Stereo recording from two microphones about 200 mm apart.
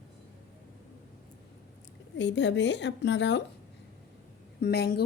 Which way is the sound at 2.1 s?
65° left (ahead or behind).